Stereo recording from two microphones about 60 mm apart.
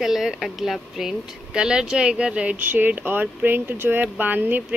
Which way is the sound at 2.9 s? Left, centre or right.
Right.